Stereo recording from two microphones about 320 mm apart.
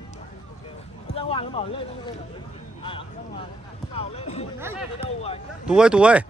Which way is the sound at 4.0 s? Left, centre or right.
Centre.